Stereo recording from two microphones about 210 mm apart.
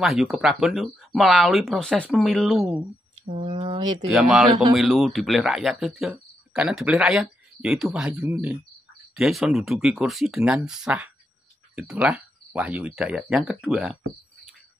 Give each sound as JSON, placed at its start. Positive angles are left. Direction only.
{"t": 0.0, "sound": "a man's voice", "side_deg": 0}
{"t": 3.3, "sound": "a sound", "side_deg": -30}
{"t": 4.1, "sound": "a man's voice", "side_deg": 0}